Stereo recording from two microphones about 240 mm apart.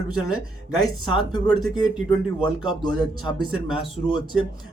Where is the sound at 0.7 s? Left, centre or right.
Centre.